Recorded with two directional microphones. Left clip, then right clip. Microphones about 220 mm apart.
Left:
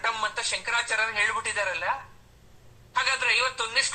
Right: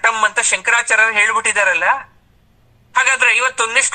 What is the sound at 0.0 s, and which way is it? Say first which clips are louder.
A man's voice: right 13 dB; 35° right (ahead or behind).